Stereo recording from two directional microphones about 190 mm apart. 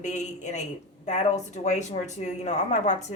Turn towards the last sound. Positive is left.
turn(degrees=40)  # may be behind; listen again after turning